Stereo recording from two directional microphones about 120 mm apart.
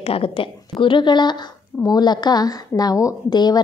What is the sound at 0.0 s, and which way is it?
A woman's voice, 50° left (ahead or behind).